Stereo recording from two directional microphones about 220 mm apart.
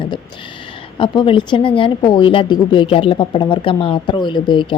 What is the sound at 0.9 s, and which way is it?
A woman's voice, 20° left (ahead or behind).